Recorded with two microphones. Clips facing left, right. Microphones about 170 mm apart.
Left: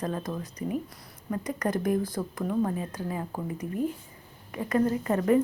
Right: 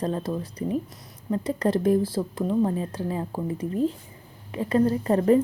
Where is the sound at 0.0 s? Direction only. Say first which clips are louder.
Right 4 dB; 30° right (ahead or behind).